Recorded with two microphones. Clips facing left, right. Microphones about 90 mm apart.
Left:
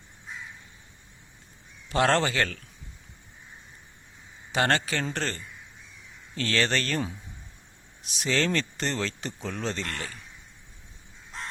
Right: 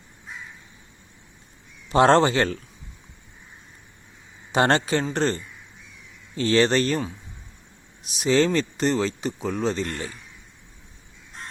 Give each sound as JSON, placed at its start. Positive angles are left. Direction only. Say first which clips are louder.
{"t": 1.9, "sound": "a man's voice", "louder": "right 7 dB", "side_deg": -25}
{"t": 4.5, "sound": "a man's voice", "louder": "right 5 dB", "side_deg": -25}
{"t": 8.2, "sound": "speech", "louder": "right 7 dB", "side_deg": -15}
{"t": 9.8, "sound": "a man's voice", "louder": "right 5 dB", "side_deg": -20}